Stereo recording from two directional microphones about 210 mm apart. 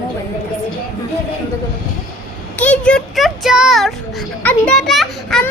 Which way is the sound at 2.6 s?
5° left (ahead or behind).